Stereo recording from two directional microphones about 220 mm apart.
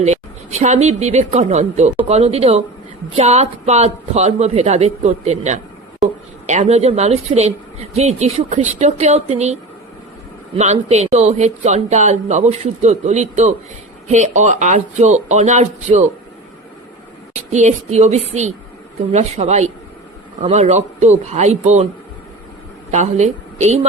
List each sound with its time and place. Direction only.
0.0 s a woman's voice: 30° right (ahead or behind)
17.5 s a man's voice: 30° right (ahead or behind)
22.9 s a woman's voice: 30° right (ahead or behind)